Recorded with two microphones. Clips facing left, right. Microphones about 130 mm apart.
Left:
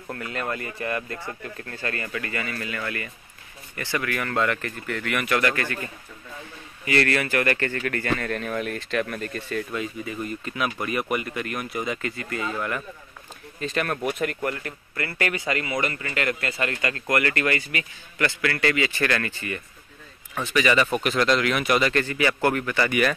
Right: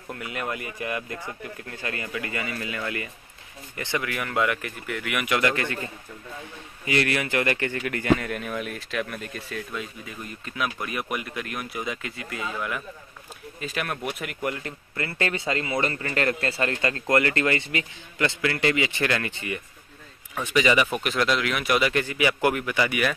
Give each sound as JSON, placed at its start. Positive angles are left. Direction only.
{"t": 0.1, "sound": "speech", "side_deg": -15}
{"t": 6.9, "sound": "speech", "side_deg": -15}
{"t": 14.4, "sound": "speech", "side_deg": -20}
{"t": 20.9, "sound": "speech", "side_deg": 0}